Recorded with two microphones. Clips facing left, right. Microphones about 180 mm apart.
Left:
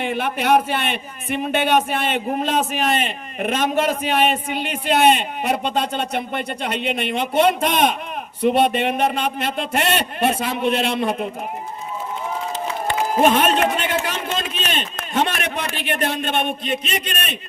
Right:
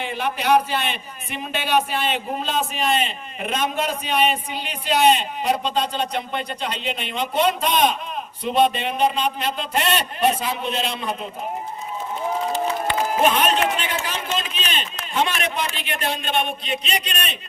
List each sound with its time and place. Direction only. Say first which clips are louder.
0.0 s a man's voice: left 3 dB; 55° left (ahead or behind)
12.9 s a sound: left 4 dB; 50° left (ahead or behind)
13.6 s a man's voice: left 3 dB; 55° left (ahead or behind)